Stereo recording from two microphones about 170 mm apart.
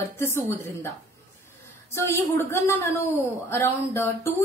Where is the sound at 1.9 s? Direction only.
15° left (ahead or behind).